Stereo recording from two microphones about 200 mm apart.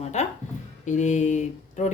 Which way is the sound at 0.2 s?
35° left (ahead or behind).